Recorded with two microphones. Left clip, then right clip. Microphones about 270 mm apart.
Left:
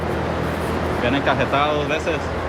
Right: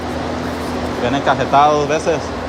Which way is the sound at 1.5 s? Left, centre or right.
Centre.